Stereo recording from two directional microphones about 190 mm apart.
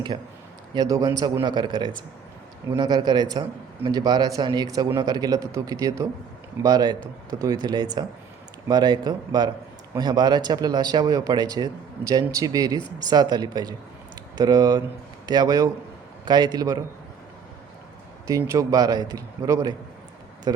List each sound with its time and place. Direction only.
0.7 s a man's voice: 20° right (ahead or behind)
18.3 s a man's voice: 15° right (ahead or behind)